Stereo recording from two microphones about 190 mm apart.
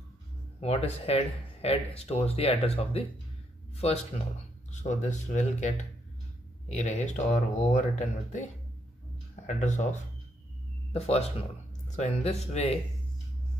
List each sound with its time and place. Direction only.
0.6 s speech: 30° left (ahead or behind)